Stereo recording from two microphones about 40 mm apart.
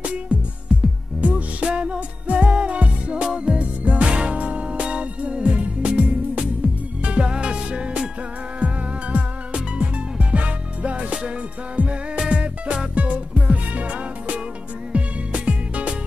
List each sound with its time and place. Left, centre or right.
0.3 s music: right